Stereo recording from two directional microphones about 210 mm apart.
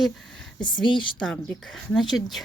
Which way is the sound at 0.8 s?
25° left (ahead or behind).